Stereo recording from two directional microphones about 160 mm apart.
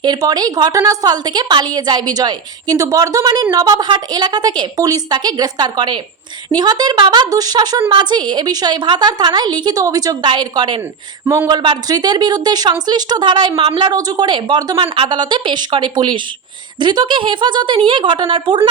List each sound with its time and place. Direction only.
0.0 s a woman's voice: 25° right (ahead or behind)